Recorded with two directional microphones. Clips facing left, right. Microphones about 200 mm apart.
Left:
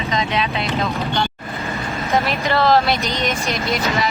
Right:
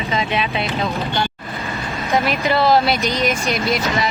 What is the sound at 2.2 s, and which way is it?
Speech, centre (ahead or behind).